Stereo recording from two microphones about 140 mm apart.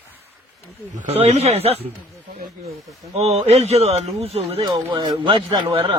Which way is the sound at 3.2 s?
50° right (ahead or behind).